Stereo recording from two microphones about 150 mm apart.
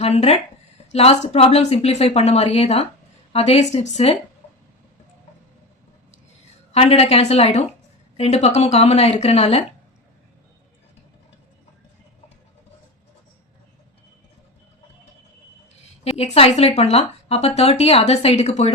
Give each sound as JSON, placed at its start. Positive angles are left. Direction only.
{"t": 0.0, "sound": "speech", "side_deg": 45}
{"t": 6.7, "sound": "speech", "side_deg": 45}
{"t": 16.0, "sound": "speech", "side_deg": 45}